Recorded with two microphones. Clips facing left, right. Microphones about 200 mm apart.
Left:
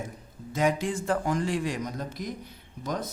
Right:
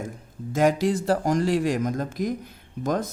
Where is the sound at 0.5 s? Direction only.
40° right (ahead or behind).